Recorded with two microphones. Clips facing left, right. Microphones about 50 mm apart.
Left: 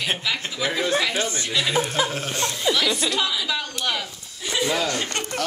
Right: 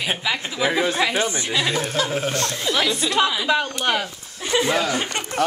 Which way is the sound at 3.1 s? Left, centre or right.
Right.